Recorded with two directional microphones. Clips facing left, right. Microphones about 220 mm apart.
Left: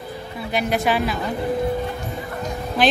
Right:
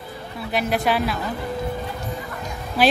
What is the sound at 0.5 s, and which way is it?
Speech, centre (ahead or behind).